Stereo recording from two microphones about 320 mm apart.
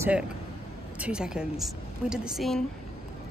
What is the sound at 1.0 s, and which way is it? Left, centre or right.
A woman's voice, centre.